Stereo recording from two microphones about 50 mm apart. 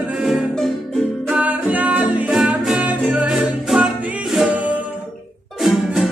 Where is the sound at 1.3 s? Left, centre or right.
Right.